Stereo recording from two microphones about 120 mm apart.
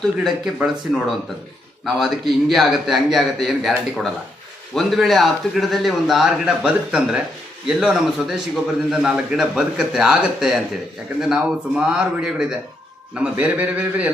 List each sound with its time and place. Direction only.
0.3 s speech: 5° right (ahead or behind)